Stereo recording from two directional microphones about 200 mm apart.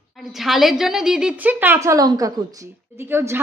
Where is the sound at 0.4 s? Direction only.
Centre (ahead or behind).